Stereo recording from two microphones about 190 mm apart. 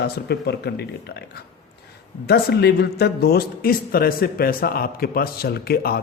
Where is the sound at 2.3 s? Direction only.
55° left (ahead or behind).